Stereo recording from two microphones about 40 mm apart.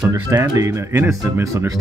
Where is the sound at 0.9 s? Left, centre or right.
Right.